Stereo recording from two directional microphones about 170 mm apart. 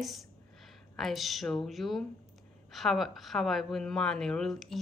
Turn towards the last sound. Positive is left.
turn(degrees=0)  # may be behind; listen again after turning